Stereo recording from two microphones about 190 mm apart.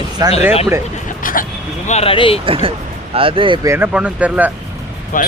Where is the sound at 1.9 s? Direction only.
30° left (ahead or behind).